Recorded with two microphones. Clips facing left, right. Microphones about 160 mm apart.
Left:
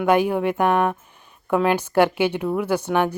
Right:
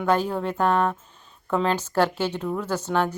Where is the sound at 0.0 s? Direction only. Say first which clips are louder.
Left 5 dB; 15° left (ahead or behind).